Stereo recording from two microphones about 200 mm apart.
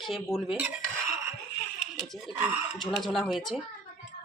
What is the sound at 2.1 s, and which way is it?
A woman's voice, centre (ahead or behind).